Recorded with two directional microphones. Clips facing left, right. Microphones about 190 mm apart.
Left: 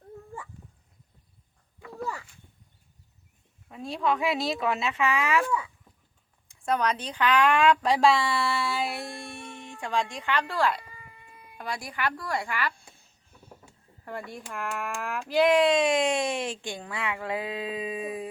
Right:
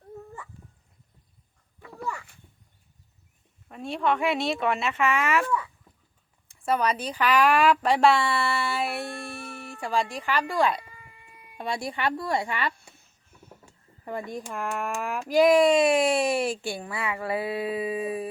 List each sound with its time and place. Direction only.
3.7 s speech: centre (ahead or behind)
6.5 s a child's voice: 5° right (ahead or behind); by 12.7 s 25° right (ahead or behind)
14.0 s a child's voice: 15° right (ahead or behind)